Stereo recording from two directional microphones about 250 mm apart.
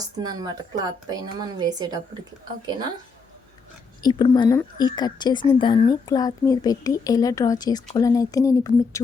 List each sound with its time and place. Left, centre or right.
0.2 s speech: centre
4.0 s speech: centre